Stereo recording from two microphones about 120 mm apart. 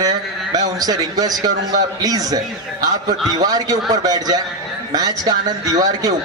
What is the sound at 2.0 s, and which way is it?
A man's voice, 30° right (ahead or behind).